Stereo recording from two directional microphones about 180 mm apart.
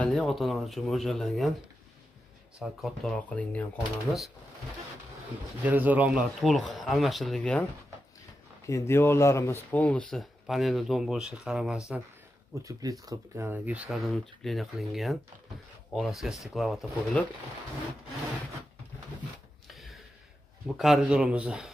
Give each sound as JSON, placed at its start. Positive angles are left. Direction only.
{"t": 0.0, "sound": "speech", "side_deg": 0}
{"t": 2.6, "sound": "speech", "side_deg": 0}
{"t": 5.6, "sound": "speech", "side_deg": -10}
{"t": 8.6, "sound": "speech", "side_deg": 15}
{"t": 12.5, "sound": "speech", "side_deg": -15}
{"t": 19.7, "sound": "a sound", "side_deg": 0}
{"t": 20.6, "sound": "speech", "side_deg": 0}